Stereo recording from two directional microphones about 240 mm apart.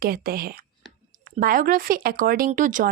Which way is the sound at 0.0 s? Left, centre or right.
Right.